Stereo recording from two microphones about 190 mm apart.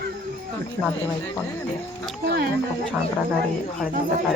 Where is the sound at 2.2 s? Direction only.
60° right (ahead or behind).